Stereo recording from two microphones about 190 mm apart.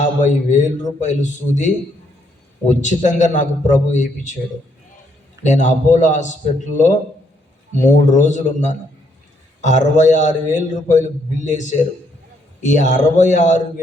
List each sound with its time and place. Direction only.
0.2 s a man's voice: 40° left (ahead or behind)
5.4 s a man's voice: 40° left (ahead or behind)
8.1 s a man's voice: 40° left (ahead or behind)